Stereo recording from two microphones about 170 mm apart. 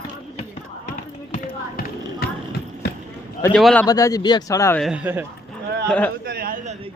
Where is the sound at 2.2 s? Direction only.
65° left (ahead or behind).